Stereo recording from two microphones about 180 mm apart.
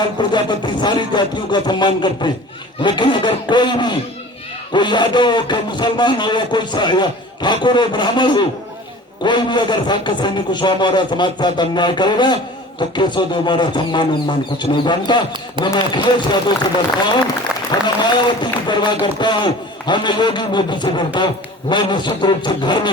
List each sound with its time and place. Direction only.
0.2 s a man's voice: 25° left (ahead or behind)
17.7 s a man's voice: 25° left (ahead or behind)